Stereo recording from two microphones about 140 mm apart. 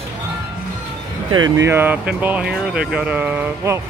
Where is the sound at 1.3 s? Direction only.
30° right (ahead or behind).